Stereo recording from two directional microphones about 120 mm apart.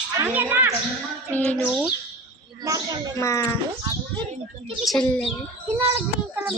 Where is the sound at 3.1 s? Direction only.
25° left (ahead or behind).